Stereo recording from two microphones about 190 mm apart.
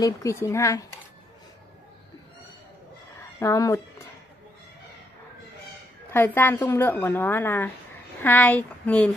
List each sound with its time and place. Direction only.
0.0 s a woman's voice: 15° left (ahead or behind)
3.3 s a woman's voice: 15° left (ahead or behind)
6.1 s a woman's voice: 10° left (ahead or behind)